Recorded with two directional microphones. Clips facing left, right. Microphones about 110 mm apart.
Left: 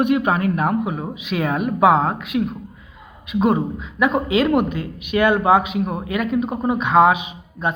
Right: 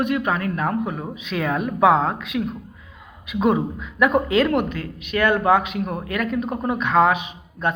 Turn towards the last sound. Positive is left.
turn(degrees=10)  # may be behind; listen again after turning